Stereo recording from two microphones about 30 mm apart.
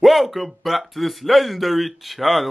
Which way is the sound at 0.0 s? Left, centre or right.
Centre.